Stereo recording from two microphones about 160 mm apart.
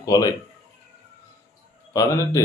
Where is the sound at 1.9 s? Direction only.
20° left (ahead or behind).